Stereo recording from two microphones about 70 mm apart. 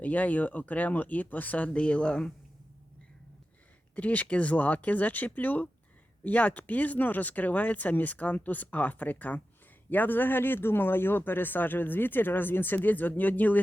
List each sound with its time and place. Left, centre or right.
0.0 s speech: left
3.9 s speech: left